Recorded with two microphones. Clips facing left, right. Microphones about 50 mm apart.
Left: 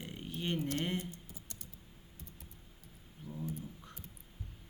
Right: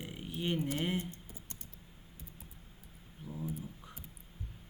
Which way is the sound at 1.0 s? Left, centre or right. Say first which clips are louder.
Right 2 dB; right.